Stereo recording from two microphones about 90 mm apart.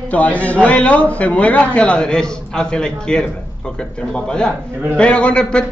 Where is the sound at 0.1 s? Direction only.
15° left (ahead or behind).